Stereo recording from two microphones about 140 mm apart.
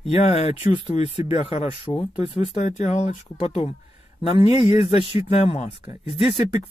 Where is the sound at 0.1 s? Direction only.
45° left (ahead or behind).